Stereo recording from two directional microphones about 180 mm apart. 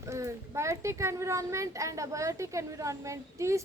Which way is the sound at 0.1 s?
15° right (ahead or behind).